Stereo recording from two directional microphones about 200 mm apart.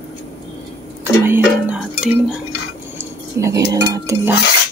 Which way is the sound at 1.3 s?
10° right (ahead or behind).